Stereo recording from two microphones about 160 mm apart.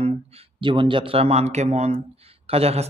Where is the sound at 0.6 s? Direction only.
30° right (ahead or behind).